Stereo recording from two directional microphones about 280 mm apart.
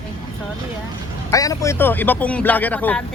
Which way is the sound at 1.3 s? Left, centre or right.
Centre.